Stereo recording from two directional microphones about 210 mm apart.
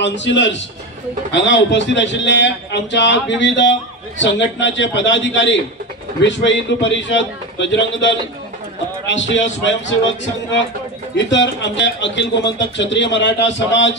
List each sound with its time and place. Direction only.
0.0 s a man's voice: 60° left (ahead or behind)
11.1 s speech: 55° left (ahead or behind)